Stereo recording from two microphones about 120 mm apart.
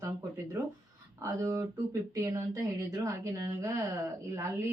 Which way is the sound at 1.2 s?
25° right (ahead or behind).